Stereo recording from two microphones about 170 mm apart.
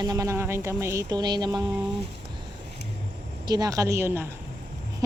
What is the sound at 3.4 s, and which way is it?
Speech, 25° right (ahead or behind).